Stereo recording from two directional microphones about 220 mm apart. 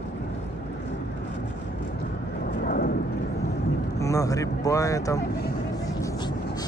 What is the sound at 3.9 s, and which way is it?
Vehicle, 15° left (ahead or behind).